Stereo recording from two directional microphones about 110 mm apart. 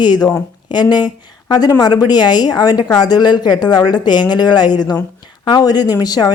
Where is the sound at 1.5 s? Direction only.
35° left (ahead or behind).